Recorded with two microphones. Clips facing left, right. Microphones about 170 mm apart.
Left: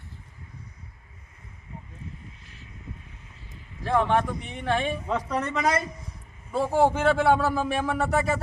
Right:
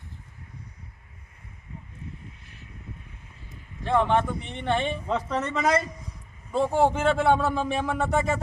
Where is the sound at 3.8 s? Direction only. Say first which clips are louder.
Even; centre (ahead or behind).